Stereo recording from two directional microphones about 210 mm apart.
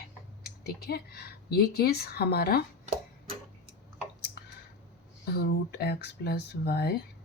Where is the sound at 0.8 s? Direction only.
50° left (ahead or behind).